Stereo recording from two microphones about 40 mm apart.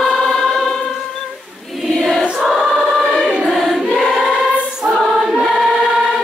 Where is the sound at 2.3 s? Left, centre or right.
Centre.